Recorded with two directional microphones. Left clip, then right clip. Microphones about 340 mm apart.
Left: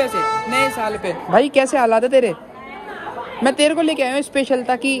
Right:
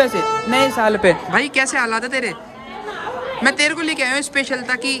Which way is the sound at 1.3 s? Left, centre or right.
Centre.